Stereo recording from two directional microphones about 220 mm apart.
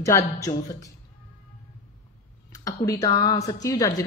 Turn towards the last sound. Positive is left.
turn(degrees=15)  # may be behind; listen again after turning